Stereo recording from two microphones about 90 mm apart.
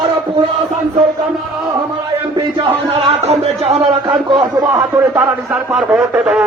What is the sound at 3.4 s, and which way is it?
Speech, 90° right.